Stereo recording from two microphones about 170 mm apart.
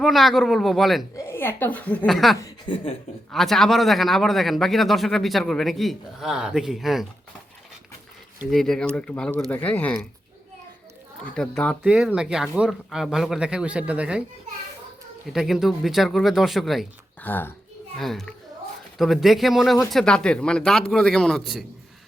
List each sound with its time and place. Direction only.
0.0 s speech: centre (ahead or behind)
1.1 s a woman's voice: 15° left (ahead or behind)
2.4 s speech: 30° left (ahead or behind)
3.3 s speech: centre (ahead or behind)
8.4 s a woman's voice: centre (ahead or behind)
11.3 s speech: 5° left (ahead or behind)
15.3 s speech: centre (ahead or behind)
17.2 s a woman's voice: 10° left (ahead or behind)